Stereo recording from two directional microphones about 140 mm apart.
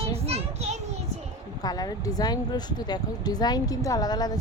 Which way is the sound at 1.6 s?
30° left (ahead or behind).